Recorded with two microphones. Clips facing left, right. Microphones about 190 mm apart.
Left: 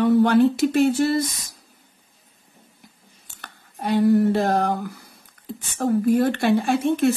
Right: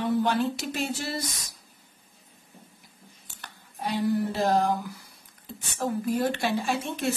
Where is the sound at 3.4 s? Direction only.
55° left (ahead or behind).